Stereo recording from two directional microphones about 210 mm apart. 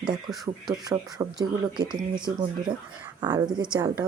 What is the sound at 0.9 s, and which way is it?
A woman's voice, 20° right (ahead or behind).